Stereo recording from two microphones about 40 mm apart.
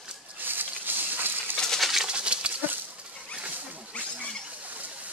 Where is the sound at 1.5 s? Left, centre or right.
Centre.